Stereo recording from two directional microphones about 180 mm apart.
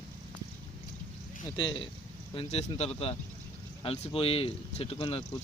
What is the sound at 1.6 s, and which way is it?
Speech, 25° left (ahead or behind).